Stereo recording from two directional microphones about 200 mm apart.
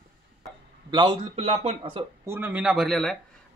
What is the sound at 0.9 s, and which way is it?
Speech, 20° right (ahead or behind).